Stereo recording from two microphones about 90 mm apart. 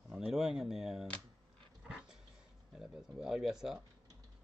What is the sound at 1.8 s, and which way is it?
Dog, 10° right (ahead or behind).